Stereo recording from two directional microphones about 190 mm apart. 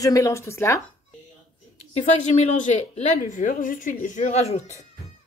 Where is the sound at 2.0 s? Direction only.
35° left (ahead or behind).